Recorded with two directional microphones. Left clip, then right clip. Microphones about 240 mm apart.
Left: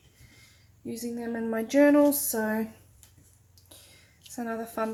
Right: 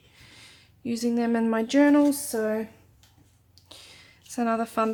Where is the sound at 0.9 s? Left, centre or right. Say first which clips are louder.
Right 8 dB; right; by 2.6 s centre.